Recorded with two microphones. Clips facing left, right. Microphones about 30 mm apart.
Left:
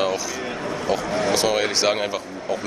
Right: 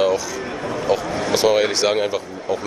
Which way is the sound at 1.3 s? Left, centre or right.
Centre.